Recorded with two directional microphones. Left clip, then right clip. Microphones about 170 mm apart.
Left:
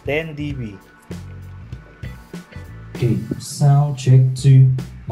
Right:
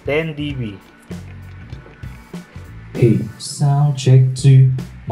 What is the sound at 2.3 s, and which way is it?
Music, centre (ahead or behind).